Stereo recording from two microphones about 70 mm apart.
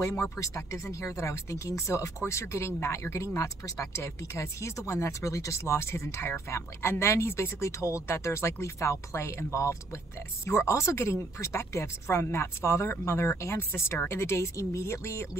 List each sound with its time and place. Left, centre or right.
0.0 s speech: left